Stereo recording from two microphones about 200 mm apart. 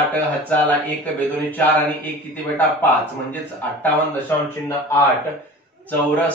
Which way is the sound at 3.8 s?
10° left (ahead or behind).